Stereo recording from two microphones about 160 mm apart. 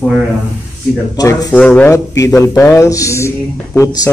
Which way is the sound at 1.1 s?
25° left (ahead or behind).